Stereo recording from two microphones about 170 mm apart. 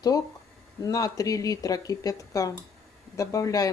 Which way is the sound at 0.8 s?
20° left (ahead or behind).